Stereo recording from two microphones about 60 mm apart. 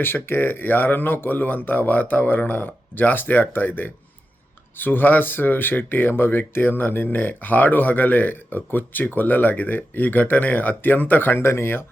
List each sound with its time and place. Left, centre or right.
0.0 s speech: left
11.4 s speech: left